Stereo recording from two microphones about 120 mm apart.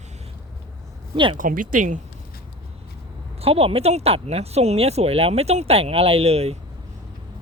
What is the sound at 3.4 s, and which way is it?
Speech, 55° right (ahead or behind).